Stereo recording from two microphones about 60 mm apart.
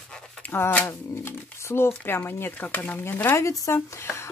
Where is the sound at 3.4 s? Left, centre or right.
Left.